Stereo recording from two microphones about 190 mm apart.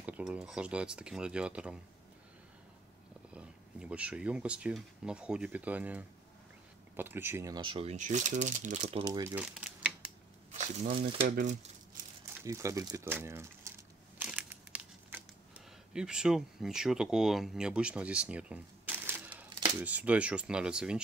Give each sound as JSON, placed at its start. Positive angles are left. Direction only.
{"t": 0.0, "sound": "speech", "side_deg": -5}
{"t": 3.3, "sound": "speech", "side_deg": -5}
{"t": 7.9, "sound": "speech", "side_deg": -40}
{"t": 9.0, "sound": "speech", "side_deg": -20}
{"t": 9.3, "sound": "typewriter", "side_deg": -5}
{"t": 12.4, "sound": "a sound", "side_deg": -15}
{"t": 15.9, "sound": "speech", "side_deg": -5}